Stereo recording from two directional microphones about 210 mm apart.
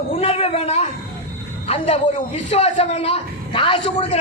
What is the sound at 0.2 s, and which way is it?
A man's voice, 30° left (ahead or behind).